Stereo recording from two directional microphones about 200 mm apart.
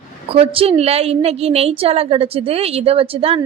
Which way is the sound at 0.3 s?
30° right (ahead or behind).